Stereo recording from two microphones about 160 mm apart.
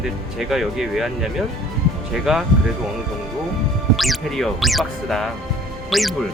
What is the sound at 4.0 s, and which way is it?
Speech, centre (ahead or behind).